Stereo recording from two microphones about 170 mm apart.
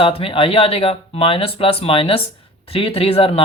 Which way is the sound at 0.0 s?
35° left (ahead or behind).